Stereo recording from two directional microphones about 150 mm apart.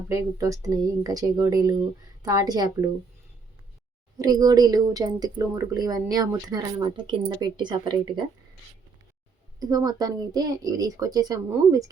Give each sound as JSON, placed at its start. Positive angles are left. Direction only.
{"t": 0.1, "sound": "speech", "side_deg": -20}
{"t": 4.2, "sound": "speech", "side_deg": -25}
{"t": 9.6, "sound": "speech", "side_deg": -25}